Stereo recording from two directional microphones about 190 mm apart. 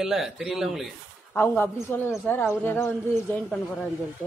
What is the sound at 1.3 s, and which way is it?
A man's voice, 10° left (ahead or behind).